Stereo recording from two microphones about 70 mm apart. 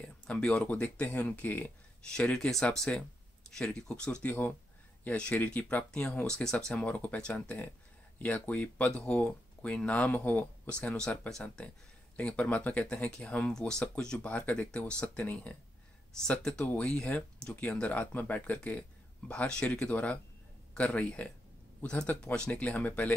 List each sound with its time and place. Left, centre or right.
0.3 s speech: centre
2.1 s speech: centre
4.3 s speech: left
11.0 s speech: centre